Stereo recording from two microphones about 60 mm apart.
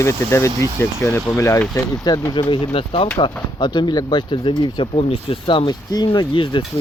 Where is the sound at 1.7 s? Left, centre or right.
Left.